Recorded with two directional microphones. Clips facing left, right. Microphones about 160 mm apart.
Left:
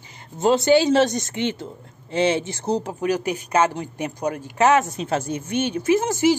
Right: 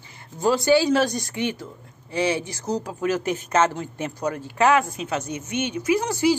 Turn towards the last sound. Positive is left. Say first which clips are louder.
# left 2 dB
turn(degrees=20)  # may be behind; listen again after turning